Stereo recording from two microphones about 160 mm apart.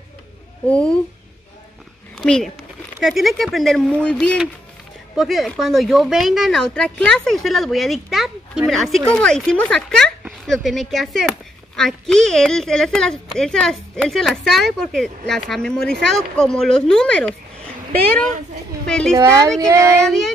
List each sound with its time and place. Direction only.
0.7 s a child's voice: 10° left (ahead or behind)
2.1 s speech: centre (ahead or behind)
18.9 s speech: 5° left (ahead or behind)
19.1 s a woman's voice: 20° right (ahead or behind)